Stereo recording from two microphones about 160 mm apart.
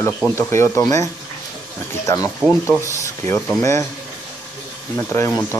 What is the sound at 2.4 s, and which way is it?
Speech, 15° left (ahead or behind).